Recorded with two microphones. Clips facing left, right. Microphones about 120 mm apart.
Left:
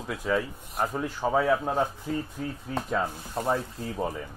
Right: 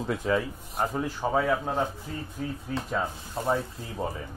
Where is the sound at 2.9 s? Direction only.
Centre (ahead or behind).